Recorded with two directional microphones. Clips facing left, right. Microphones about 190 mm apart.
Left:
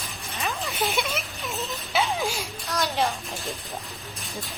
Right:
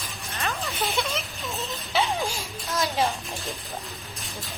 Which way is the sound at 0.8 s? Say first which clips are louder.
Left 1 dB; 15° left (ahead or behind).